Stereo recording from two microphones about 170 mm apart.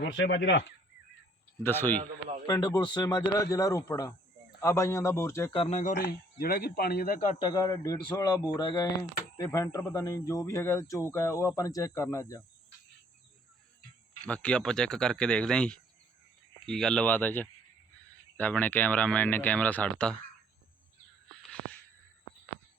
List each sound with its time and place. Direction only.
0.0 s speech: 90° left
1.6 s speech: 15° left (ahead or behind)
2.5 s speech: 25° left (ahead or behind)
5.5 s speech: 40° left (ahead or behind)
5.9 s speech: 75° left (ahead or behind); by 7.4 s 50° left (ahead or behind)
7.4 s speech: 25° left (ahead or behind)
14.2 s speech: 5° left (ahead or behind)
21.5 s a sound: 10° left (ahead or behind)